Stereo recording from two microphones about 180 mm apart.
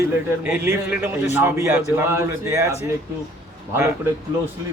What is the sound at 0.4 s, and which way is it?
A man's voice, 10° right (ahead or behind).